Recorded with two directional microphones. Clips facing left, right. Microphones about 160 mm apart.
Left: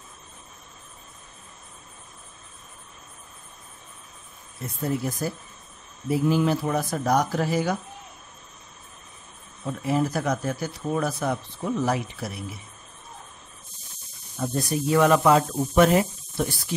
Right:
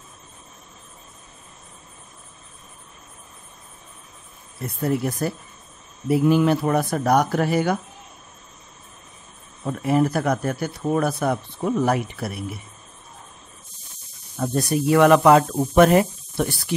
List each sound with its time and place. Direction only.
4.8 s speech: 65° right (ahead or behind)
9.7 s speech: 60° right (ahead or behind)
14.4 s speech: 70° right (ahead or behind)